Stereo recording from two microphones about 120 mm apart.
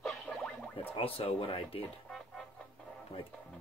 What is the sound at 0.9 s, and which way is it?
Speech, 50° left (ahead or behind).